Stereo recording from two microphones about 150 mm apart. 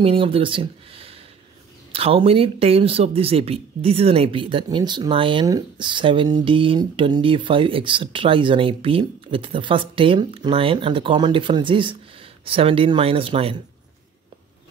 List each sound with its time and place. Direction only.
0.0 s speech: 40° right (ahead or behind)